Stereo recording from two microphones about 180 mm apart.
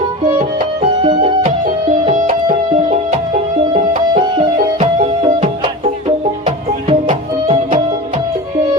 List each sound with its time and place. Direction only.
0.8 s music: 30° right (ahead or behind)
4.8 s music: 30° right (ahead or behind)